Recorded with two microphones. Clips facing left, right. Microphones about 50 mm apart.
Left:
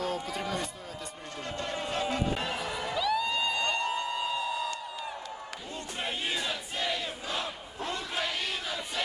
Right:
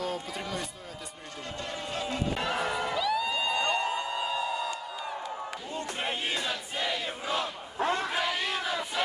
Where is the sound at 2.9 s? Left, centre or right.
Centre.